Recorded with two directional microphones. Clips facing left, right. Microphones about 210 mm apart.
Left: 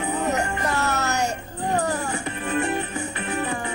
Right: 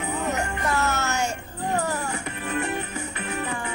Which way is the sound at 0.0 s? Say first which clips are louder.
Left 3 dB; 35° left (ahead or behind).